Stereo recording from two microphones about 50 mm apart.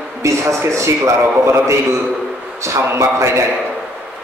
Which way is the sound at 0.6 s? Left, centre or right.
Right.